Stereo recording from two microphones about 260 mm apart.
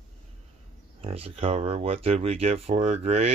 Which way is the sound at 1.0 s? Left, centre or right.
Right.